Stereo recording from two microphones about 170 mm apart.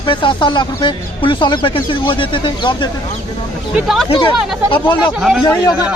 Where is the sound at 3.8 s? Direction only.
Centre (ahead or behind).